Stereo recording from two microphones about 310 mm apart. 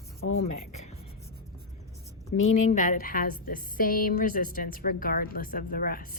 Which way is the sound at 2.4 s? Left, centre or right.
Left.